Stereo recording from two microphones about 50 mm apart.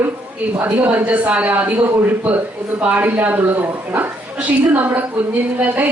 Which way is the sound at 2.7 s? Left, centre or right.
Right.